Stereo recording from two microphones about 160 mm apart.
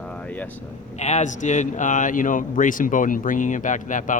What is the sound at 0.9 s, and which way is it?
A man's voice, 45° left (ahead or behind).